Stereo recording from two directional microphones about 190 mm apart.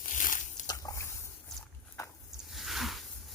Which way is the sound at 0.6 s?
20° left (ahead or behind).